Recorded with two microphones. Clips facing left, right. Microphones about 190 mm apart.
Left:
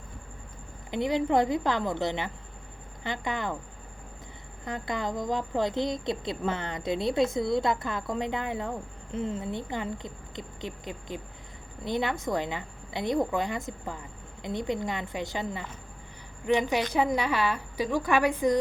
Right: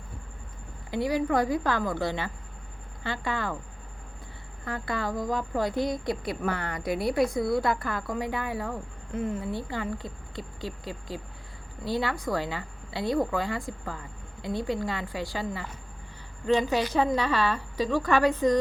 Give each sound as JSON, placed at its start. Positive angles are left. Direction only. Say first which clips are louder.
{"t": 0.9, "sound": "a woman's voice", "louder": "even", "side_deg": 20}
{"t": 4.6, "sound": "a woman's voice", "louder": "even", "side_deg": 20}